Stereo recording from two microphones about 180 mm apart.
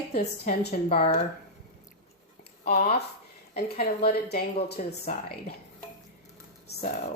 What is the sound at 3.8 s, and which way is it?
Speech, 55° left (ahead or behind).